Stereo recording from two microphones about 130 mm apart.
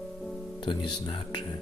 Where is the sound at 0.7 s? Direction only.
40° left (ahead or behind).